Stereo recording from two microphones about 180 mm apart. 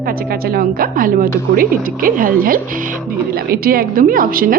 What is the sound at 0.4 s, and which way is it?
Speech, 55° right (ahead or behind).